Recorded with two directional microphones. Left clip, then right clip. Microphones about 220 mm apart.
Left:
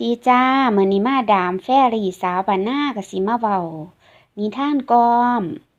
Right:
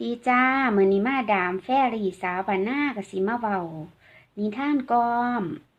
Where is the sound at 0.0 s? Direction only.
25° left (ahead or behind).